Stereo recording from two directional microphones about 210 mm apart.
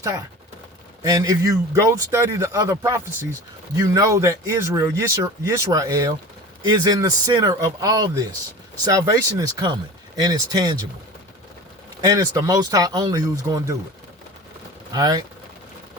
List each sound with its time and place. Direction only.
0.0 s speech: 20° right (ahead or behind)
12.0 s speech: 15° right (ahead or behind)
14.9 s speech: 15° right (ahead or behind)